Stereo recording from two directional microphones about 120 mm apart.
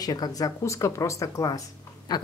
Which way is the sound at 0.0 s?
30° left (ahead or behind).